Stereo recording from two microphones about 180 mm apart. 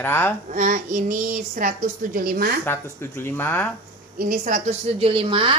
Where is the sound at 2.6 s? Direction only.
15° left (ahead or behind).